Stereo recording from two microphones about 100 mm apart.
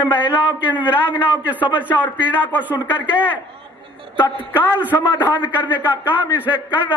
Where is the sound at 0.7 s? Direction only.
15° right (ahead or behind).